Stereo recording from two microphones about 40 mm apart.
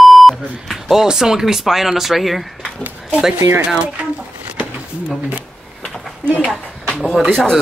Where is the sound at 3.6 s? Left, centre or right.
Right.